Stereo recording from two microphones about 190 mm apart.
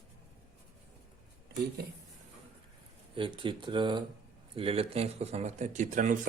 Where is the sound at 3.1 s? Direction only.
25° right (ahead or behind).